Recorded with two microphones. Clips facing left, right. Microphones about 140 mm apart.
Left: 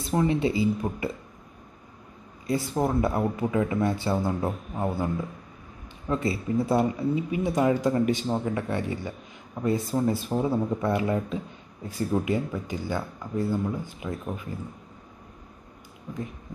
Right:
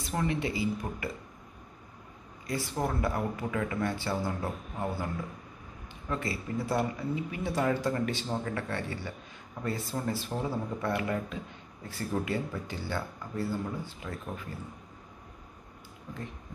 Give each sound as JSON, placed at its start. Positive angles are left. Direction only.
{"t": 0.0, "sound": "speech", "side_deg": 25}
{"t": 2.4, "sound": "speech", "side_deg": 25}